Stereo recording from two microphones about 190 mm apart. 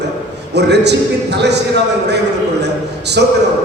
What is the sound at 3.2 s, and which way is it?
Speech, 65° right (ahead or behind).